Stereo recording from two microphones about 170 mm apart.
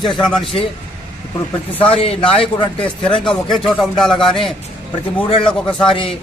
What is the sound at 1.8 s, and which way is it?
Speech, 30° left (ahead or behind).